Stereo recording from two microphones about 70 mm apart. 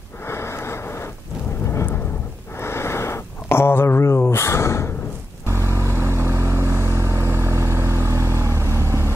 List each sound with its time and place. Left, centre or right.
0.3 s wheeze: left
2.6 s a sound: left
5.5 s vehicle: right